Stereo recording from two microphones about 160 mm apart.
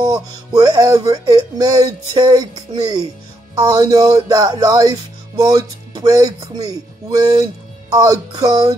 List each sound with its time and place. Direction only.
0.0 s speech: 25° right (ahead or behind)